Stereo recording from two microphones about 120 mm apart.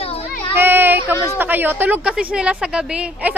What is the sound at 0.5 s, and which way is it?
Child singing, 15° right (ahead or behind).